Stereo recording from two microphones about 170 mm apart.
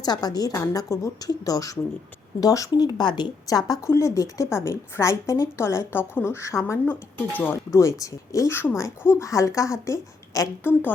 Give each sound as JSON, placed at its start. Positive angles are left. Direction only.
{"t": 0.0, "sound": "a woman's voice", "side_deg": 25}